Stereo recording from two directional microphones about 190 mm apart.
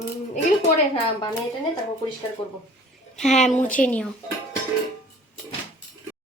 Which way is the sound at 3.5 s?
5° left (ahead or behind).